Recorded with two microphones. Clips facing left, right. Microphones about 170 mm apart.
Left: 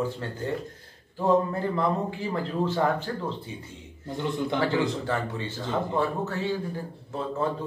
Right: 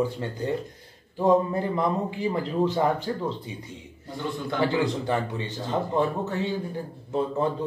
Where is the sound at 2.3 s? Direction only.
15° right (ahead or behind).